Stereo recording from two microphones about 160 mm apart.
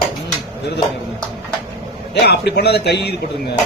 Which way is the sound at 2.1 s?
90° left.